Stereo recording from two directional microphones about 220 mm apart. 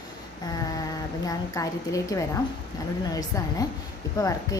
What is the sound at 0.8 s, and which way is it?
A woman's voice, 15° left (ahead or behind).